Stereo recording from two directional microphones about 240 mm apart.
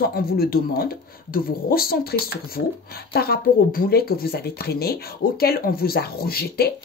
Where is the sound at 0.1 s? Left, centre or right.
Left.